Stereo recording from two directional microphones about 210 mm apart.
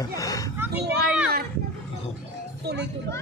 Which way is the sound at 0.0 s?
15° left (ahead or behind).